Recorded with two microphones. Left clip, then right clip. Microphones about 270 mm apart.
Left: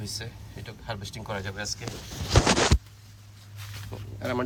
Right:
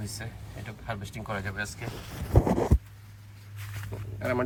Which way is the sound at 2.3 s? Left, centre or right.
Right.